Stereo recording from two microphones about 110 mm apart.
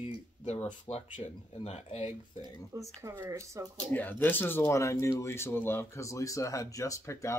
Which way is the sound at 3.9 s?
15° left (ahead or behind).